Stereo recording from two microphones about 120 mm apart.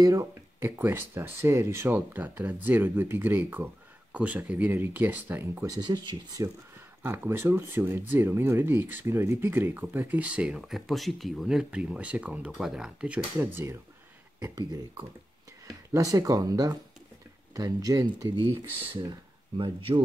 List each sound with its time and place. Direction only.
0.0 s speech: 25° right (ahead or behind)
5.8 s speech: 40° right (ahead or behind)
7.0 s speech: 20° right (ahead or behind)
14.4 s speech: 30° right (ahead or behind)
19.5 s speech: 45° right (ahead or behind)